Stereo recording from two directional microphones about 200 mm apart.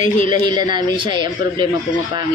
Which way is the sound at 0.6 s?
25° right (ahead or behind).